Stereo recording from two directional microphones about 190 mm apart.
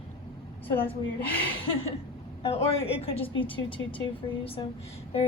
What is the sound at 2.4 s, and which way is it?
A woman's voice, 30° left (ahead or behind).